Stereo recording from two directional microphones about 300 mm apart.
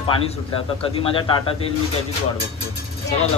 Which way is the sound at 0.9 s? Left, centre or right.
Centre.